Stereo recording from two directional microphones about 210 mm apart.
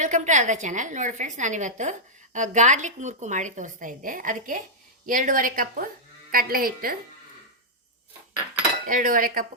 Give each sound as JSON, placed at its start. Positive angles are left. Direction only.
{"t": 0.0, "sound": "a woman's voice", "side_deg": -35}
{"t": 8.9, "sound": "a woman's voice", "side_deg": -40}